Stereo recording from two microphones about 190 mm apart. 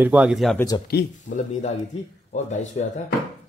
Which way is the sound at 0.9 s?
55° left (ahead or behind).